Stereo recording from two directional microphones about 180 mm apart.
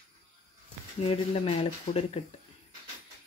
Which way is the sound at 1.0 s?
35° left (ahead or behind).